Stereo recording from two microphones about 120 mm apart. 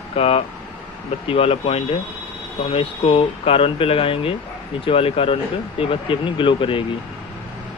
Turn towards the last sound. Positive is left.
turn(degrees=45)  # may be behind; listen again after turning